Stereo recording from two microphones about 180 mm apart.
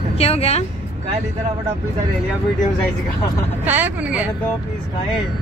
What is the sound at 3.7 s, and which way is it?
Speech, 10° right (ahead or behind).